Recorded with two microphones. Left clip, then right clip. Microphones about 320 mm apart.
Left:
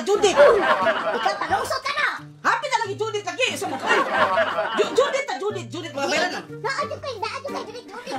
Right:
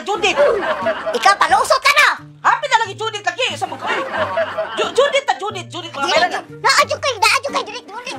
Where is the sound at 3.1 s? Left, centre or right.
Right.